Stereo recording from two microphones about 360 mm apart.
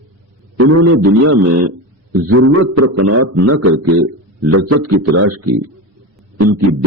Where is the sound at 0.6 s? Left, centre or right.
Right.